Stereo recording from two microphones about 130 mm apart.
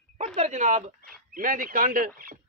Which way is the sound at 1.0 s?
90° right.